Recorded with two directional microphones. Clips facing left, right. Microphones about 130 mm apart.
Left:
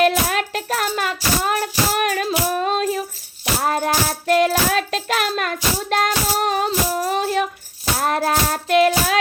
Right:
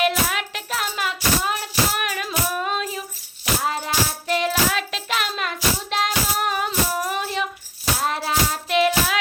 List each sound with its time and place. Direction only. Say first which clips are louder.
0.0 s music: left 5 dB; 40° left (ahead or behind)
3.6 s music: left 6 dB; 55° left (ahead or behind); by 7.3 s 35° left (ahead or behind)
7.9 s music: left 5 dB; 50° left (ahead or behind)